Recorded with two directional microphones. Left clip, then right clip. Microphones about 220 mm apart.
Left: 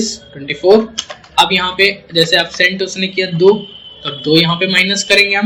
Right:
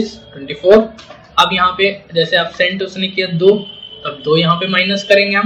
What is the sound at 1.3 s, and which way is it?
Speech, 35° left (ahead or behind).